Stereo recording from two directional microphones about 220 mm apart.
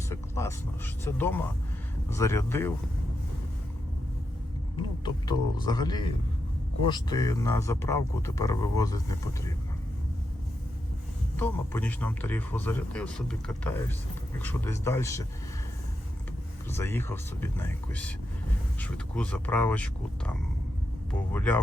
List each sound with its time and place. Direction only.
0.1 s a sound: 15° left (ahead or behind)
1.0 s speech: 10° left (ahead or behind)
4.8 s speech: 20° left (ahead or behind)
11.3 s speech: 10° left (ahead or behind)
16.7 s speech: 10° left (ahead or behind)